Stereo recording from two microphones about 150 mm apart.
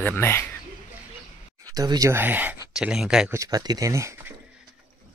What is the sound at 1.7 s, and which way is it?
Speech, 25° right (ahead or behind).